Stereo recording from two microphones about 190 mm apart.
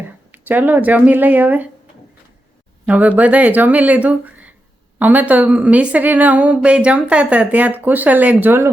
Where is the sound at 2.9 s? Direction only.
5° right (ahead or behind).